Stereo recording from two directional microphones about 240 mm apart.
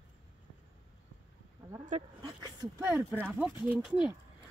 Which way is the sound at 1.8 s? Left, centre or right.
Right.